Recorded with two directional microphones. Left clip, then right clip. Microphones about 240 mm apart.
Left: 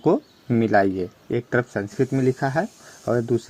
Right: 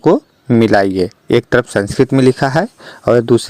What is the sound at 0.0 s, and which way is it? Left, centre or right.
Speech, right.